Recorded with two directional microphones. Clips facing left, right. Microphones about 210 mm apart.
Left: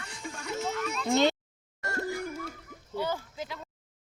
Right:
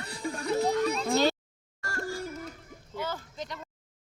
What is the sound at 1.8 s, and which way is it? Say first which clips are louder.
Music: left 2 dB; 20° left (ahead or behind).